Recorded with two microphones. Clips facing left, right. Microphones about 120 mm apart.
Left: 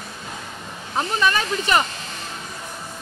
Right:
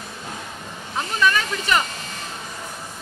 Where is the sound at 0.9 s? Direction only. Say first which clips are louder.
Even; 30° left (ahead or behind).